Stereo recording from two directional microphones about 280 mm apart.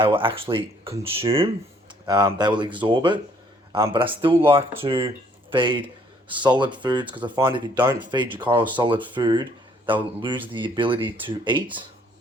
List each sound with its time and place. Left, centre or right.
0.0 s speech: centre